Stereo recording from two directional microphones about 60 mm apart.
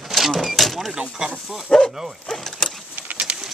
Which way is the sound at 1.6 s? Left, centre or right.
Centre.